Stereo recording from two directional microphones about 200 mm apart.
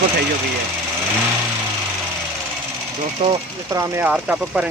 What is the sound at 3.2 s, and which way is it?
Speech, 35° right (ahead or behind).